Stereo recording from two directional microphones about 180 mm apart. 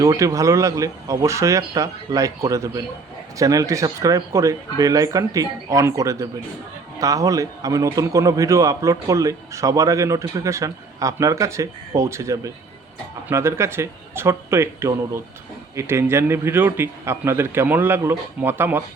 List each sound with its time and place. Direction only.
0.0 s a man's voice: 20° right (ahead or behind)